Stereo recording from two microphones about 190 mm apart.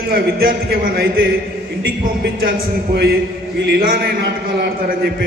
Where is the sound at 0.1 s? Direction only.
55° right (ahead or behind).